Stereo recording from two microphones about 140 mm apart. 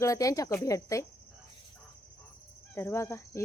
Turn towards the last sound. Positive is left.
turn(degrees=20)  # may be behind; listen again after turning